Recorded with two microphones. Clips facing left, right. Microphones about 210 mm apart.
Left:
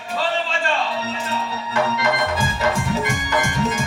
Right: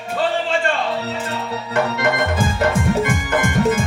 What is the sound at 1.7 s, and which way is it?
Music, 55° right (ahead or behind).